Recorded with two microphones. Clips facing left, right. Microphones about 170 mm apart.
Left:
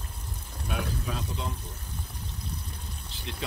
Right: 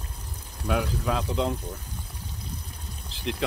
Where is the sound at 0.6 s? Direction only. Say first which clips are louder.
Right 7 dB; 85° right.